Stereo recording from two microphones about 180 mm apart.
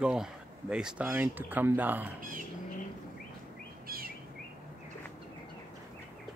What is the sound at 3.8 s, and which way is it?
Bird, 55° right (ahead or behind).